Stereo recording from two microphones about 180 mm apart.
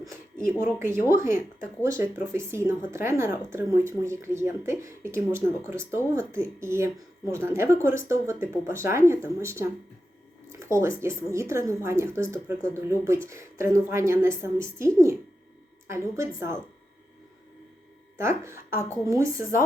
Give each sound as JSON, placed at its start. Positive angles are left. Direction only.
{"t": 0.0, "sound": "speech", "side_deg": -15}
{"t": 18.2, "sound": "speech", "side_deg": -15}